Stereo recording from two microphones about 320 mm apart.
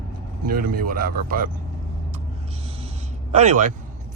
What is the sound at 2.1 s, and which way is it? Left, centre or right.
Vehicle, centre.